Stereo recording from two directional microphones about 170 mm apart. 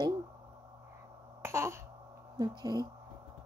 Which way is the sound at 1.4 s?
15° right (ahead or behind).